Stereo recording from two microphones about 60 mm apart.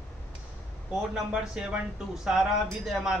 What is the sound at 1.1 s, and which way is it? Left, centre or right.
Speech, centre.